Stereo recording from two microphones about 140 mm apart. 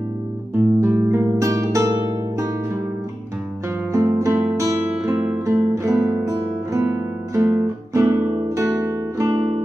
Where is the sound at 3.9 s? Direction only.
20° right (ahead or behind).